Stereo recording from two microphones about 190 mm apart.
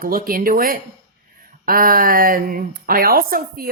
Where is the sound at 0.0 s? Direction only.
50° right (ahead or behind).